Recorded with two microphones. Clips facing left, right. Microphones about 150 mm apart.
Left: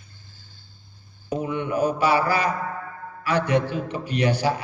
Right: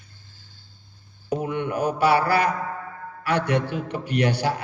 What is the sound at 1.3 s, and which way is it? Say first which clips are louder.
A man's voice: even; 60° right (ahead or behind).